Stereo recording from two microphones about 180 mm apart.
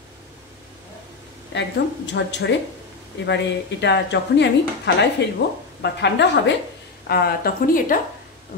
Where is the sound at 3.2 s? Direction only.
75° left (ahead or behind).